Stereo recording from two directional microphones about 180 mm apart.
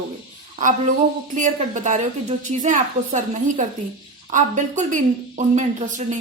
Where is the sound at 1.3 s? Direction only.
45° right (ahead or behind).